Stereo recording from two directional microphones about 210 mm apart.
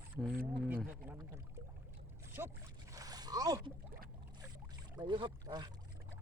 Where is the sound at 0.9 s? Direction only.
5° right (ahead or behind).